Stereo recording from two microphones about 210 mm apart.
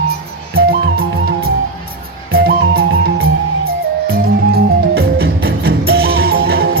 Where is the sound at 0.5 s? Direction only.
45° right (ahead or behind).